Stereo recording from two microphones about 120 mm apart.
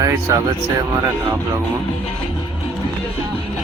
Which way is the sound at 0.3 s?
25° right (ahead or behind).